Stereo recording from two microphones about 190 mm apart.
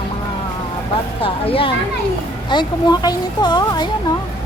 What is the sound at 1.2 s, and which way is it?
Speech, 30° left (ahead or behind).